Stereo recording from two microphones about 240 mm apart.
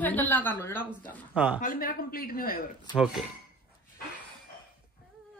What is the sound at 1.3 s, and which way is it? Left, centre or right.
Speech, centre.